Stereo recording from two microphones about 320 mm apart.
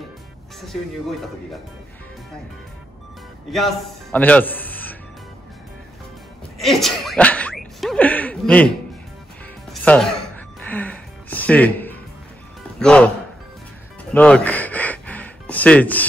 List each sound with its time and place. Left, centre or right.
3.5 s a man's voice: centre
6.6 s a sound: centre
9.7 s music: centre
12.7 s speech: centre
14.1 s music: centre